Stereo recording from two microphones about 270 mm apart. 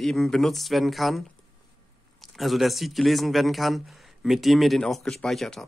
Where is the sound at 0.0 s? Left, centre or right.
Centre.